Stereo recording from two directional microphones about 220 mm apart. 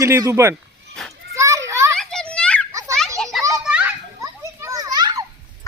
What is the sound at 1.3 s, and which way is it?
Children playing, 15° right (ahead or behind).